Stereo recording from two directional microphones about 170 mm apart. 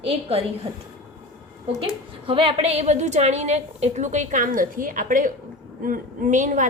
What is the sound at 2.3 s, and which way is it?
A woman's voice, 30° right (ahead or behind).